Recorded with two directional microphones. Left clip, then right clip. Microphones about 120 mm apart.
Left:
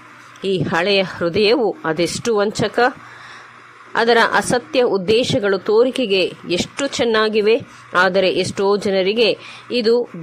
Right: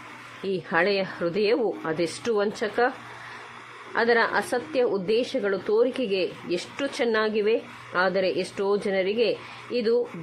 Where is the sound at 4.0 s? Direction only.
40° left (ahead or behind).